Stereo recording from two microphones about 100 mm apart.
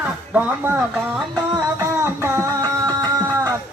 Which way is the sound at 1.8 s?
25° right (ahead or behind).